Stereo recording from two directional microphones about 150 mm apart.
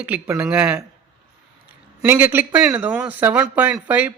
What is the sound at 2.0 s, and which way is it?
Speech, 15° right (ahead or behind).